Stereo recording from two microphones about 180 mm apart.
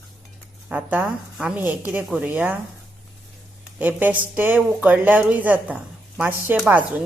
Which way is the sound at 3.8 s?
10° right (ahead or behind).